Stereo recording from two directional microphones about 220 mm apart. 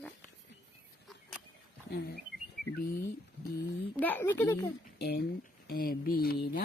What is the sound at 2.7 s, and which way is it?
Speech, 40° left (ahead or behind).